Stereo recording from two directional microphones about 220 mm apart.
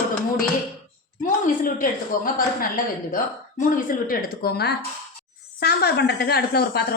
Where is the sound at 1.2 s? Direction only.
40° left (ahead or behind).